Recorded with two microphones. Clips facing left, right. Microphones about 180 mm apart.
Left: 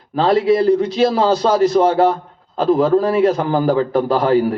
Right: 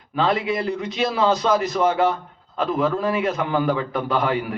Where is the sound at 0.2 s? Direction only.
35° left (ahead or behind).